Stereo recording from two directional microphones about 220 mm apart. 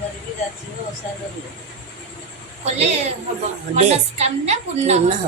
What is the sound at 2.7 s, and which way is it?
A woman's voice, 30° right (ahead or behind).